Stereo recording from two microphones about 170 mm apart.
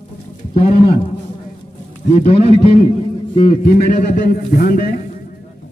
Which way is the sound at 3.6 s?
55° left (ahead or behind).